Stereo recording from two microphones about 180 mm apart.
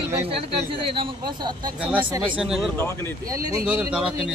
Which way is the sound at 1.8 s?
5° right (ahead or behind).